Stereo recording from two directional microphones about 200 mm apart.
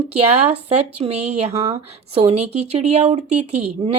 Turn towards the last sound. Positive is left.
turn(degrees=-35)  # may be behind; listen again after turning